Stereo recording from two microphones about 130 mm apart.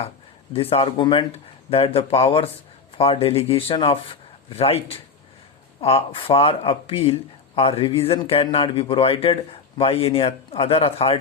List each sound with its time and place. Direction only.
0.5 s speech: 45° left (ahead or behind)